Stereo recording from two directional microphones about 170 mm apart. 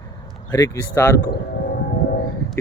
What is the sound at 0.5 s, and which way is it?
Speech, 20° left (ahead or behind).